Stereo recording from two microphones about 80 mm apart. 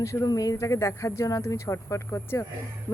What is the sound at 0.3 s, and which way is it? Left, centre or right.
Speech, left.